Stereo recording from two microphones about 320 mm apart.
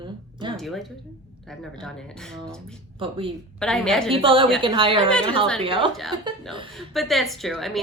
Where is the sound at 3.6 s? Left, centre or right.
Centre.